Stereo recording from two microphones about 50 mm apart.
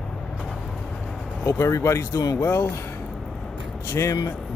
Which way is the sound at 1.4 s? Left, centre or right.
Left.